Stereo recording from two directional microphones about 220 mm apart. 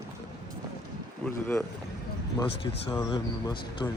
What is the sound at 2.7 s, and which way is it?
Speech, 20° left (ahead or behind).